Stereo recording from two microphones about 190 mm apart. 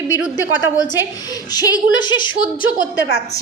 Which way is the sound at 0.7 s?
20° left (ahead or behind).